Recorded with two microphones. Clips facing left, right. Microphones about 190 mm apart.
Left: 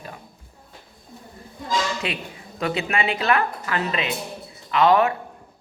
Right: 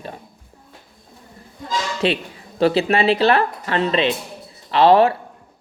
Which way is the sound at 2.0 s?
30° right (ahead or behind).